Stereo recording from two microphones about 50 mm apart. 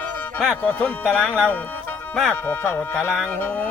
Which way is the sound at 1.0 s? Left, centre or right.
Centre.